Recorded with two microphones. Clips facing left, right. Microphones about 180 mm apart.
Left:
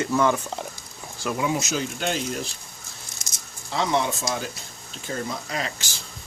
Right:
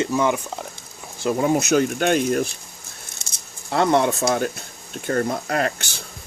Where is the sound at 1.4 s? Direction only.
50° right (ahead or behind).